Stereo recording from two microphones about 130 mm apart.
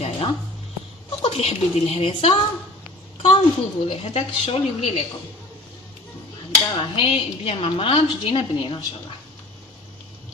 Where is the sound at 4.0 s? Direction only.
50° left (ahead or behind).